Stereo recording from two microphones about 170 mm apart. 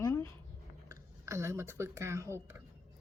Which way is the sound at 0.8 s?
20° right (ahead or behind).